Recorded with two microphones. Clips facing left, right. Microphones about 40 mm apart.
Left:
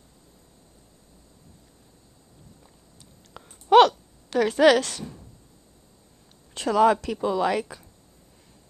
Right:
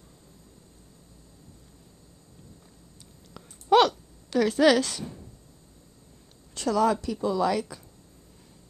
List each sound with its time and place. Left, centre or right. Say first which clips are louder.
3.6 s a sound: left 4 dB; centre
4.7 s speech: left 1 dB; centre
6.5 s speech: left 4 dB; left
6.9 s speech: left 3 dB; left